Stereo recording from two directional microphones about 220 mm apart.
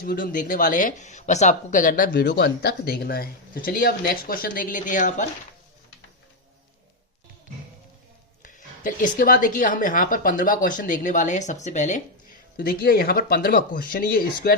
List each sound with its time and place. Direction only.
0.0 s a woman's voice: 40° left (ahead or behind)
8.4 s a woman's voice: 35° left (ahead or behind)